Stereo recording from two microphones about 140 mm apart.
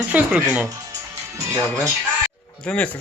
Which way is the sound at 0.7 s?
20° right (ahead or behind).